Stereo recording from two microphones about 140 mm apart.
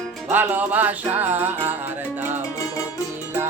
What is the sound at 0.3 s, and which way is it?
Music, 15° right (ahead or behind).